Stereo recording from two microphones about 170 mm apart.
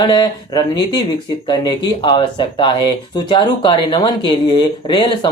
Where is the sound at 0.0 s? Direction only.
25° left (ahead or behind).